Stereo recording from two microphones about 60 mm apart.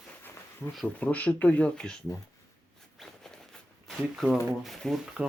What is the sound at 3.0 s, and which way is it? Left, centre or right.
Zipper, centre.